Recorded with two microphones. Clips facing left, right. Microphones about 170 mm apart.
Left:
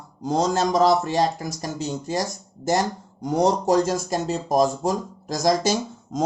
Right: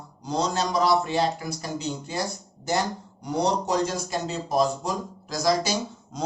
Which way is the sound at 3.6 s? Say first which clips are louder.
Left 6 dB; 45° left (ahead or behind).